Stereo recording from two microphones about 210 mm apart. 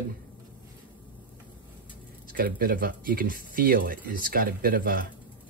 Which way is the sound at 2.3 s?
45° right (ahead or behind).